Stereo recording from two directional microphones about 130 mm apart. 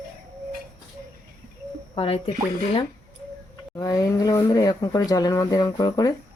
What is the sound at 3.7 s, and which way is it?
Speech, 25° left (ahead or behind).